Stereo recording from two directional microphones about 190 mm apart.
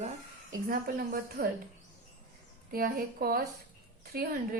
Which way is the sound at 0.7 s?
50° right (ahead or behind).